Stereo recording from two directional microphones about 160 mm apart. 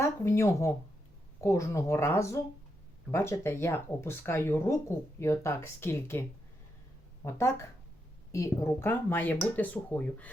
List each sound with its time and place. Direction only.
0.0 s speech: 15° left (ahead or behind)
7.3 s speech: 15° left (ahead or behind)